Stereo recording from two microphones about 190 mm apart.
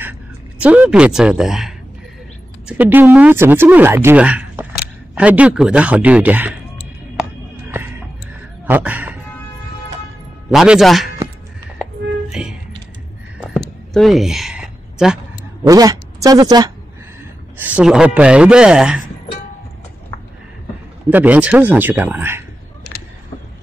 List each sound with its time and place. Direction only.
0.6 s speech: 5° right (ahead or behind)
8.6 s speech: 10° right (ahead or behind)
10.5 s speech: centre (ahead or behind)
11.8 s music: 5° right (ahead or behind)
13.4 s a sound: centre (ahead or behind)
15.6 s a woman's voice: 20° right (ahead or behind)
17.6 s speech: 5° right (ahead or behind)
21.1 s speech: 10° right (ahead or behind)